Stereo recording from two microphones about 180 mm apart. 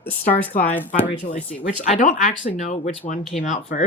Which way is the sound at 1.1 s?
30° left (ahead or behind).